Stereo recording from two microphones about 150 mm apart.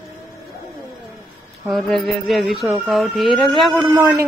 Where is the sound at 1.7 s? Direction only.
Centre (ahead or behind).